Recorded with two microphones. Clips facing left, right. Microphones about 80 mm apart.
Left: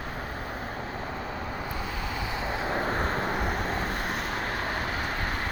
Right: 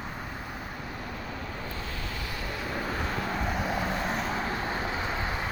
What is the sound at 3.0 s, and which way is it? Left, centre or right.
Vehicle, left.